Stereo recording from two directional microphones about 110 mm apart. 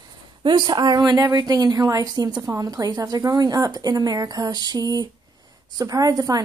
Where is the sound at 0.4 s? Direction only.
45° right (ahead or behind).